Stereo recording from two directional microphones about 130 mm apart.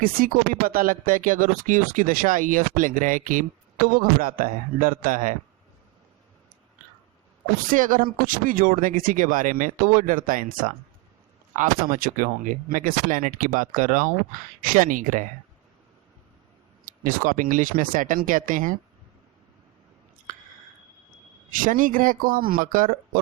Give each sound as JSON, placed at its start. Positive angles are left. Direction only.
{"t": 0.2, "sound": "speech", "side_deg": -90}
{"t": 7.7, "sound": "speech", "side_deg": -90}
{"t": 16.8, "sound": "speech", "side_deg": -90}
{"t": 21.6, "sound": "speech", "side_deg": -90}